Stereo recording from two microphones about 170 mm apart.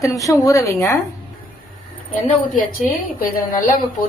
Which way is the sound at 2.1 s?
50° left (ahead or behind).